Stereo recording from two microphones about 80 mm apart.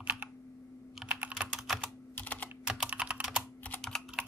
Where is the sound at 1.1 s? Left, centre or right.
Centre.